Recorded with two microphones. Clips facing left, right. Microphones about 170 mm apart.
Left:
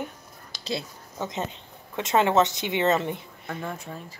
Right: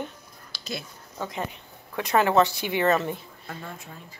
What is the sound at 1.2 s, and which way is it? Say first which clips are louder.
A woman's voice: left 1 dB; 20° left (ahead or behind).